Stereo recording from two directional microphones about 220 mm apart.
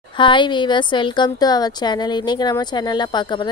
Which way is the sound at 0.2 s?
20° left (ahead or behind).